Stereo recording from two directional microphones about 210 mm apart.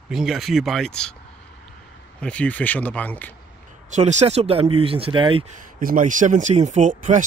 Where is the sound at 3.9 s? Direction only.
35° right (ahead or behind).